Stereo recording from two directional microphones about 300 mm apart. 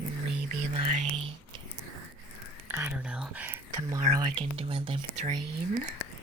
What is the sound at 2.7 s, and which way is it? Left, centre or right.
Whispering, centre.